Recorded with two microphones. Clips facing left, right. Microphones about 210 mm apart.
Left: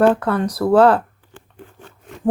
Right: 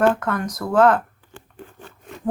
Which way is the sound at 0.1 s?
30° left (ahead or behind).